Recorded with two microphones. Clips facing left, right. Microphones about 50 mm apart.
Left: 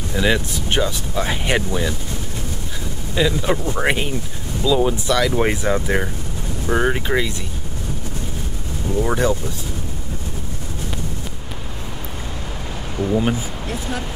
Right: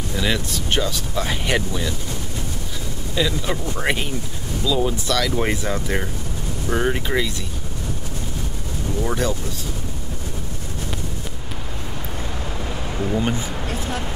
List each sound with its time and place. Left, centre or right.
0.1 s speech: centre
3.2 s speech: centre
9.0 s speech: left
13.1 s speech: centre